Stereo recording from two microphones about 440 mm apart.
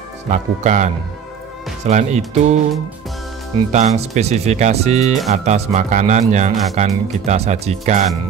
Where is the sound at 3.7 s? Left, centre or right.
Centre.